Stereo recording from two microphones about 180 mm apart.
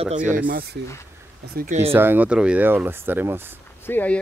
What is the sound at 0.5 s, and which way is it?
Speech, 55° right (ahead or behind).